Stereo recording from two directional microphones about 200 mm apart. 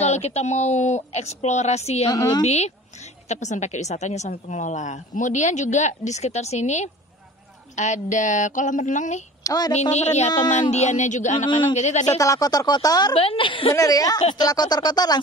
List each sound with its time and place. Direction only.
0.0 s a woman's voice: 35° left (ahead or behind)
2.0 s speech: 20° left (ahead or behind)
2.4 s a woman's voice: 35° left (ahead or behind)
9.4 s a woman's voice: 20° left (ahead or behind)
9.8 s a woman's voice: 35° left (ahead or behind)
12.2 s a woman's voice: 15° left (ahead or behind)